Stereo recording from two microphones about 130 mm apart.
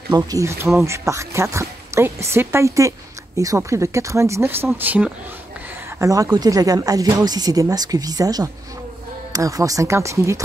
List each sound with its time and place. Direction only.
0.1 s speech: 25° right (ahead or behind)
5.9 s speech: 25° right (ahead or behind)